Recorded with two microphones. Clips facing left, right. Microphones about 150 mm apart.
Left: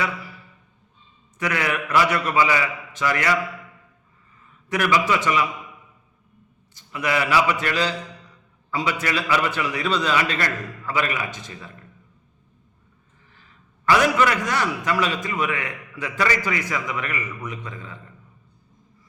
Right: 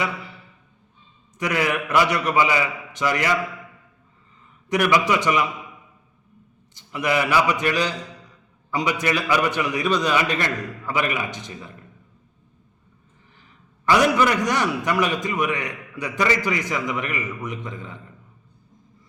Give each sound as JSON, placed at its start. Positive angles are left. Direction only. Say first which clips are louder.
{"t": 1.4, "sound": "a man's voice", "louder": "right 2 dB", "side_deg": -20}
{"t": 4.7, "sound": "a man's voice", "louder": "right 1 dB", "side_deg": -20}
{"t": 6.7, "sound": "a man's voice", "louder": "right 2 dB", "side_deg": -20}
{"t": 13.8, "sound": "a man's voice", "louder": "right 1 dB", "side_deg": -15}